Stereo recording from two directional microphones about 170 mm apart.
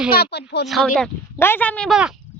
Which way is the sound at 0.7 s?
Centre (ahead or behind).